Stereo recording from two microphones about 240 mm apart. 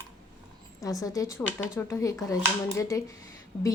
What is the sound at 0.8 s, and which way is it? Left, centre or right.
Speech, centre.